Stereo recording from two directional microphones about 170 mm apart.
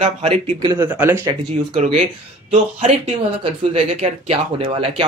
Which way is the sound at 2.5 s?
35° right (ahead or behind).